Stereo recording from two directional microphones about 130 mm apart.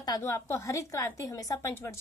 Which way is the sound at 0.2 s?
20° left (ahead or behind).